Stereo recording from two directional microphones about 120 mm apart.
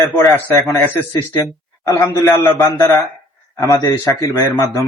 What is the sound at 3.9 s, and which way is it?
Speech, 20° left (ahead or behind).